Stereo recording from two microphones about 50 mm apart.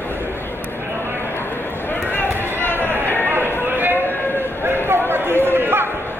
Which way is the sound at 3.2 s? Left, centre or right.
Right.